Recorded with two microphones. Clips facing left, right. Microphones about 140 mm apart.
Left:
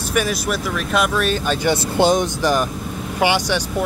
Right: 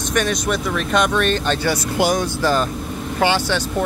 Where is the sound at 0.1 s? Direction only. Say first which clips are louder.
Right 1 dB; 5° left (ahead or behind).